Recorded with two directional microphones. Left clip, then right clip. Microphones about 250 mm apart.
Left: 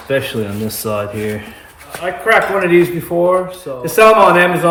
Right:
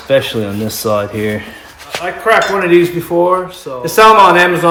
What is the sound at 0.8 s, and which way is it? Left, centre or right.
Speech, centre.